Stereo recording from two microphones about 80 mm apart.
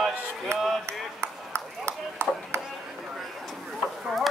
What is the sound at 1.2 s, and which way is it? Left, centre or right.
Ping, right.